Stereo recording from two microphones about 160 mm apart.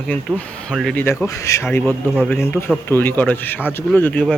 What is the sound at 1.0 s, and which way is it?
Speech, 15° left (ahead or behind).